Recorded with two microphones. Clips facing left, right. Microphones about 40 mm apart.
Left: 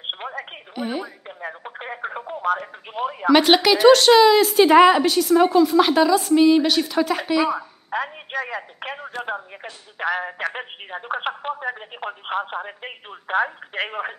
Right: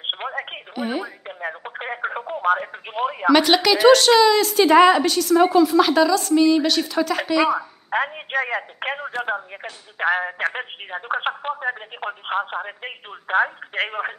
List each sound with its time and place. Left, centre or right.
0.1 s speech: centre
0.7 s a woman's voice: centre
1.2 s speech: centre
3.3 s a woman's voice: centre
5.8 s a woman's voice: centre
7.9 s speech: right; by 14.1 s centre